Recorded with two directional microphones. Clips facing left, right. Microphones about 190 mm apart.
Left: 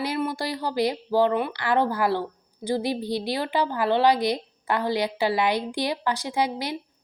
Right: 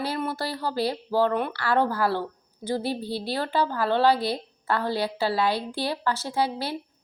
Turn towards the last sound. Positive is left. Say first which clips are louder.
# left 1 dB
turn(degrees=15)  # may be behind; listen again after turning